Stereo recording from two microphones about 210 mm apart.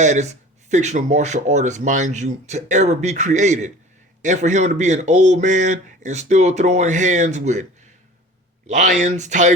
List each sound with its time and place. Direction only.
0.0 s speech: 35° right (ahead or behind)
8.6 s speech: 35° right (ahead or behind)